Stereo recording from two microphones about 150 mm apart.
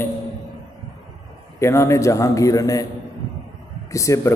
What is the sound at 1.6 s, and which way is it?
A man's voice, 20° left (ahead or behind).